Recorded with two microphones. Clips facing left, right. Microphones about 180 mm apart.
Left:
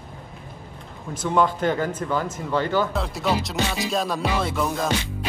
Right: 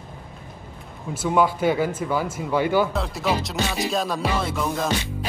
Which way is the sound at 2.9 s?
Centre (ahead or behind).